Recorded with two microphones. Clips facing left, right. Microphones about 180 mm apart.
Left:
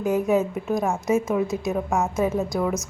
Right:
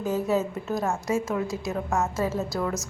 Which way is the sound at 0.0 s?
15° left (ahead or behind).